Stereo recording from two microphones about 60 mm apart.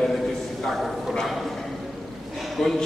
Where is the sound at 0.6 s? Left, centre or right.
Centre.